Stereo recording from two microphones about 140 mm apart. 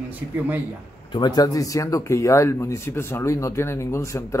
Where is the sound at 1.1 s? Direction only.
30° left (ahead or behind).